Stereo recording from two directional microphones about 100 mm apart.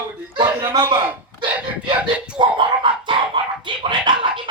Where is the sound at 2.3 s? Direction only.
55° right (ahead or behind).